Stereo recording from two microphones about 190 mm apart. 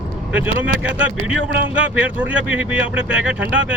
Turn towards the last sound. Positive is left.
turn(degrees=-5)  # may be behind; listen again after turning